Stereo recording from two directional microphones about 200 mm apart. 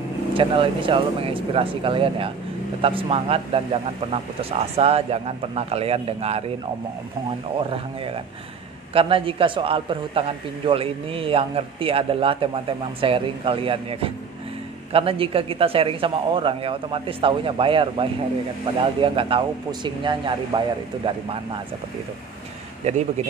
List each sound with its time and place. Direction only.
0.3 s a man's voice: 25° right (ahead or behind)
7.5 s a man's voice: 30° right (ahead or behind)
22.8 s speech: 35° right (ahead or behind)